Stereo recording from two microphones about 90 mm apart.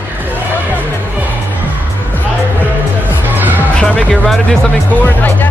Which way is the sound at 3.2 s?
20° right (ahead or behind).